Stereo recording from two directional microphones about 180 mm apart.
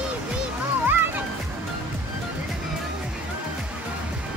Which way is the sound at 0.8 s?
10° right (ahead or behind).